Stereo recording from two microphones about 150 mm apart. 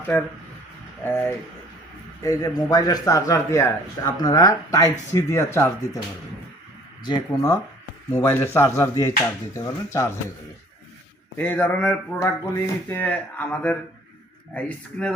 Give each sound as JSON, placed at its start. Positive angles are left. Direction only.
{"t": 0.1, "sound": "a man's voice", "side_deg": 10}
{"t": 7.0, "sound": "a man's voice", "side_deg": 25}
{"t": 11.3, "sound": "speech", "side_deg": 15}